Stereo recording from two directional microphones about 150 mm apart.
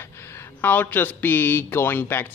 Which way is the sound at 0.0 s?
15° left (ahead or behind).